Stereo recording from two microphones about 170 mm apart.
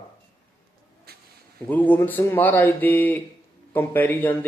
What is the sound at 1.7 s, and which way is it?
Speech, 10° left (ahead or behind).